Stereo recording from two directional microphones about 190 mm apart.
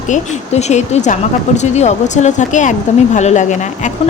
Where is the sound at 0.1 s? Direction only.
35° left (ahead or behind).